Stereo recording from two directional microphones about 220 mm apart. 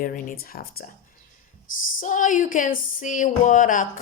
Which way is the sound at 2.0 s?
35° left (ahead or behind).